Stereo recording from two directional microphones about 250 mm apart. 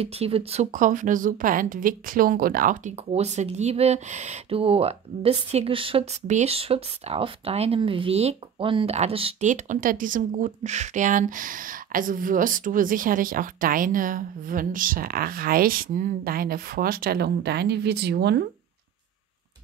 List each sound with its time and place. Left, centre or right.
0.0 s a woman's voice: right